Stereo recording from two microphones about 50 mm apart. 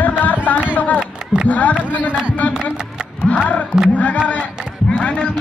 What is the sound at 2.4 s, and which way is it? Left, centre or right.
Music, left.